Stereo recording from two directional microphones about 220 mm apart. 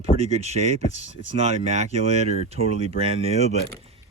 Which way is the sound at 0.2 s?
30° right (ahead or behind).